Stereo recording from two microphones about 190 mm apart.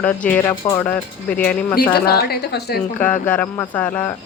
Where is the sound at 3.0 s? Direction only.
10° left (ahead or behind).